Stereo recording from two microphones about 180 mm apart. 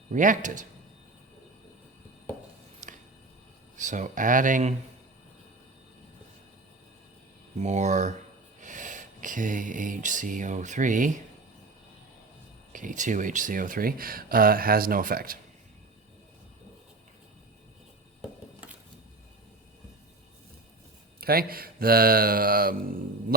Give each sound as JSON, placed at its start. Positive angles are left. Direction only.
{"t": 0.1, "sound": "speech", "side_deg": -45}
{"t": 2.8, "sound": "a sound", "side_deg": -45}
{"t": 3.8, "sound": "speech", "side_deg": -45}
{"t": 7.6, "sound": "speech", "side_deg": -40}
{"t": 12.7, "sound": "speech", "side_deg": -45}
{"t": 21.2, "sound": "speech", "side_deg": -55}